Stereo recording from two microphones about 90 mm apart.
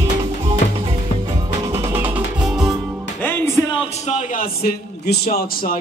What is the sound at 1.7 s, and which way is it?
Music, 30° right (ahead or behind).